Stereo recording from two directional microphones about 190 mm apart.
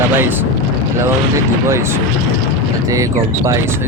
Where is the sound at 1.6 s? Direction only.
15° right (ahead or behind).